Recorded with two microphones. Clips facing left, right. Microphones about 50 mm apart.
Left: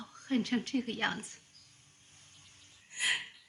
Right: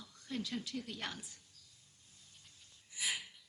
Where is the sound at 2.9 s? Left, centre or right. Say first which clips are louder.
Left 7 dB; left.